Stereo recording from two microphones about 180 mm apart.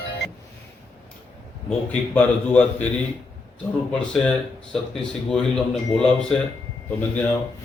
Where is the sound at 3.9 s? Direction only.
5° left (ahead or behind).